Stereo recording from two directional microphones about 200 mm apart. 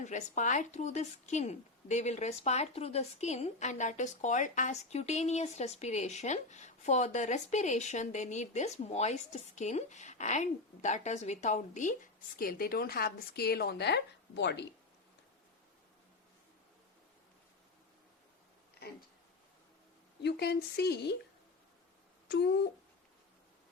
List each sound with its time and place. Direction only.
0.0 s a woman's voice: 35° left (ahead or behind); by 14.7 s 60° left (ahead or behind)
20.2 s speech: 55° left (ahead or behind)
22.3 s speech: 60° left (ahead or behind)